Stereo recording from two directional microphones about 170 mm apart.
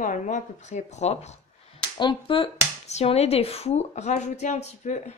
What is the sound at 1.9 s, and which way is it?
A woman's voice, 30° left (ahead or behind).